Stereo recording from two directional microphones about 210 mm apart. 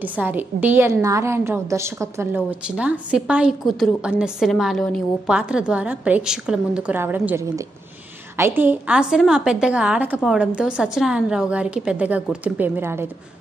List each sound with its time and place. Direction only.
0.0 s a woman's voice: 10° right (ahead or behind)